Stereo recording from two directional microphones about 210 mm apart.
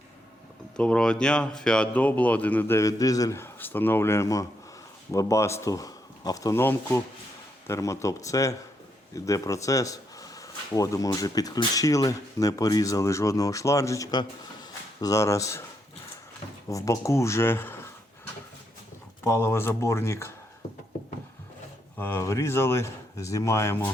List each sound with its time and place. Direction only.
0.8 s speech: 5° left (ahead or behind)
16.6 s speech: 15° left (ahead or behind)
19.2 s speech: 10° left (ahead or behind)
21.9 s speech: 10° left (ahead or behind)